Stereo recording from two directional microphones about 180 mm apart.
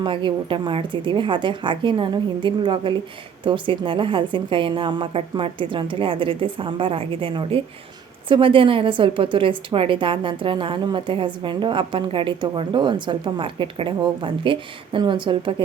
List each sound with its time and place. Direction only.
0.0 s a woman's voice: 25° right (ahead or behind)